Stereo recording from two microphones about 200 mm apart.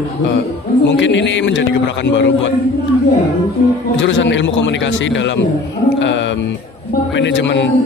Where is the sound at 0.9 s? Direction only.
60° left (ahead or behind).